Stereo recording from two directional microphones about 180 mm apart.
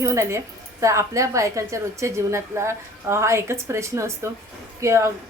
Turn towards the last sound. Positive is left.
turn(degrees=-15)  # may be behind; listen again after turning